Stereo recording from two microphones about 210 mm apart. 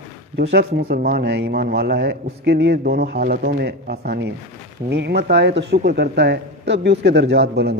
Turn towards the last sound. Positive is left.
turn(degrees=-50)  # may be behind; listen again after turning